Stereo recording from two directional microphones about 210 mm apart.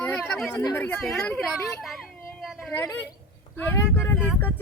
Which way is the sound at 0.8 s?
5° left (ahead or behind).